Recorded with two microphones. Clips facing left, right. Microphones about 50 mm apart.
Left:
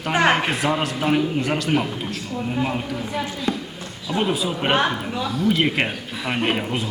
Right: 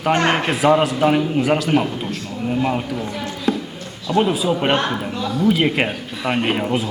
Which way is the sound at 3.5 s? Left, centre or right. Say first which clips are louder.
Right 6 dB; centre.